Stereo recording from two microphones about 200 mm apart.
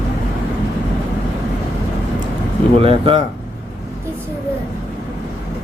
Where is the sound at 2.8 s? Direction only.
25° right (ahead or behind).